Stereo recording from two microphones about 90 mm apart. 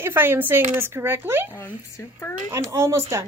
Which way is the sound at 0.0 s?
25° right (ahead or behind).